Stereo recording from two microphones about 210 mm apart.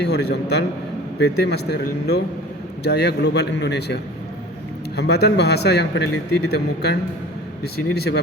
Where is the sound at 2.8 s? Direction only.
50° left (ahead or behind).